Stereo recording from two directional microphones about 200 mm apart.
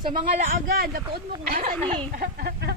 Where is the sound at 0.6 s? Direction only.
50° right (ahead or behind).